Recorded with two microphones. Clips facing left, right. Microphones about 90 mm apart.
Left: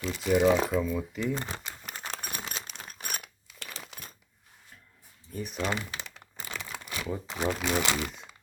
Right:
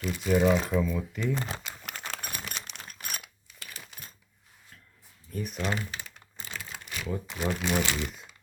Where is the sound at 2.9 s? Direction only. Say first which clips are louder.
Left 2 dB; 35° left (ahead or behind).